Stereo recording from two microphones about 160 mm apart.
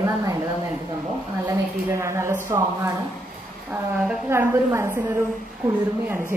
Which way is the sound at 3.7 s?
10° right (ahead or behind).